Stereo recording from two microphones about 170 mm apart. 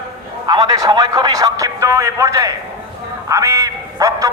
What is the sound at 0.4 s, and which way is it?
A man's voice, 25° right (ahead or behind).